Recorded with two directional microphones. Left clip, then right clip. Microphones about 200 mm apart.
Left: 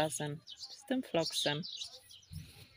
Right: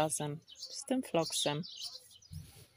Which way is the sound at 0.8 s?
5° right (ahead or behind).